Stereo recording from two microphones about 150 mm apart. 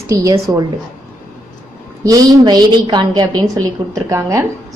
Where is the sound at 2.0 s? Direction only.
25° right (ahead or behind).